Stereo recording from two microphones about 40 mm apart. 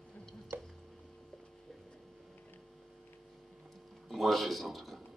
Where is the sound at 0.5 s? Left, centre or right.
Right.